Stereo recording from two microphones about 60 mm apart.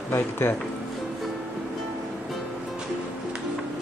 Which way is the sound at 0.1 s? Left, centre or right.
Left.